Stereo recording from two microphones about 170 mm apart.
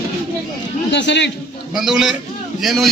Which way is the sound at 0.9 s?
90° left.